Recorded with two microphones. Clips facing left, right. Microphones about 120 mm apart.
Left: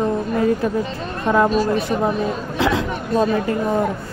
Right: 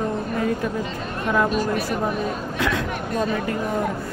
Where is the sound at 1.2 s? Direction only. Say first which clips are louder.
Left 5 dB; 35° left (ahead or behind).